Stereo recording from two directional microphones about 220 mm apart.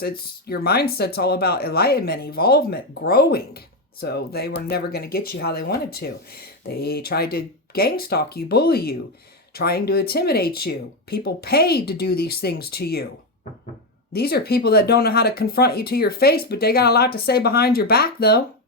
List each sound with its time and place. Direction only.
0.0 s speech: 45° left (ahead or behind)
14.1 s speech: 45° left (ahead or behind)